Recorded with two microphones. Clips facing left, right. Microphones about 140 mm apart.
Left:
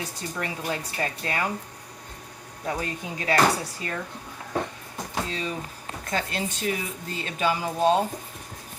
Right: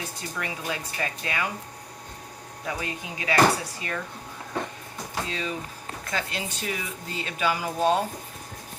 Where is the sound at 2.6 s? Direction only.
40° left (ahead or behind).